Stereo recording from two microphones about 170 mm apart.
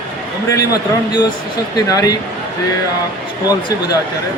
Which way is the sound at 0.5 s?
20° left (ahead or behind).